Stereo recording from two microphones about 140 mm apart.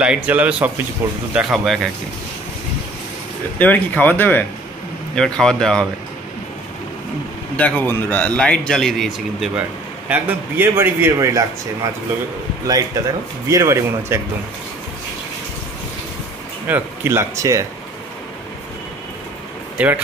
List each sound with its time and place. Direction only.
0.0 s a man's voice: 10° right (ahead or behind)
3.5 s a man's voice: 10° left (ahead or behind)
7.5 s a man's voice: 10° left (ahead or behind); by 14.2 s 20° right (ahead or behind)
16.6 s speech: 15° right (ahead or behind)
19.8 s speech: 10° right (ahead or behind)